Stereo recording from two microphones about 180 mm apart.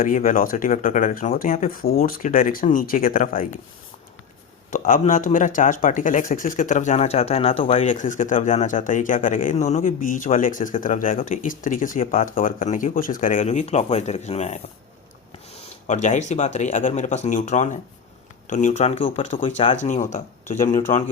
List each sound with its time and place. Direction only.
0.0 s speech: 45° left (ahead or behind)
4.7 s speech: 45° left (ahead or behind)
15.9 s speech: 40° left (ahead or behind)